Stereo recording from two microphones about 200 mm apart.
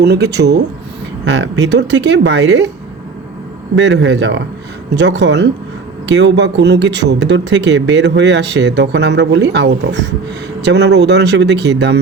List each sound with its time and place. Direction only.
0.0 s speech: 55° right (ahead or behind)
3.8 s speech: 60° right (ahead or behind)